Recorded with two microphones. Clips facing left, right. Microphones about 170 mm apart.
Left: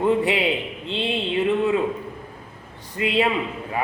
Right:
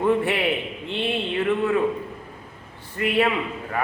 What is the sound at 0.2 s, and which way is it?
Speech, 15° left (ahead or behind).